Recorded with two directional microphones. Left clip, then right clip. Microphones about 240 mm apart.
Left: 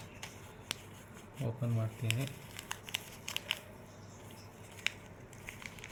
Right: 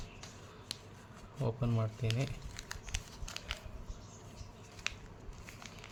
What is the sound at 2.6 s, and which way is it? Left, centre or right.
Crumpling, centre.